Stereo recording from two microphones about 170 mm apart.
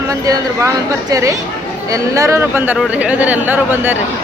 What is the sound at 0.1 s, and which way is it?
Speech, 20° right (ahead or behind).